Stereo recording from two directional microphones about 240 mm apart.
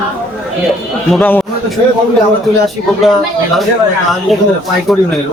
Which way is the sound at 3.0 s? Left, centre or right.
Centre.